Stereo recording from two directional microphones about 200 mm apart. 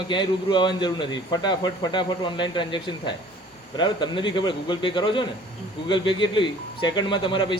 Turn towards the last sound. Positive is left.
turn(degrees=25)  # may be behind; listen again after turning